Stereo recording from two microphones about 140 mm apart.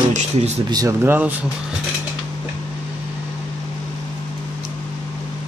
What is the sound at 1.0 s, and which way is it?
Speech, 15° right (ahead or behind).